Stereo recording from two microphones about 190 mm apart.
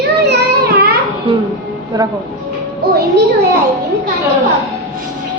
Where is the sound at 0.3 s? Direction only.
55° right (ahead or behind).